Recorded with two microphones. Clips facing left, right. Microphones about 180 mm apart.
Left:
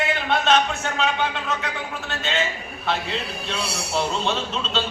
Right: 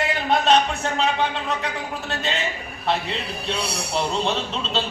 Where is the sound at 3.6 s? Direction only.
Centre (ahead or behind).